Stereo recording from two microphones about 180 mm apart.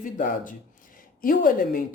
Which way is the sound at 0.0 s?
45° left (ahead or behind).